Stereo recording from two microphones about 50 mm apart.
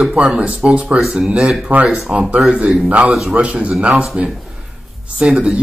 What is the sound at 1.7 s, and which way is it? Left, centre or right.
Speech, right.